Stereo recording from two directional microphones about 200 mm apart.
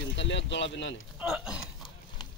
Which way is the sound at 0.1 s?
65° left (ahead or behind).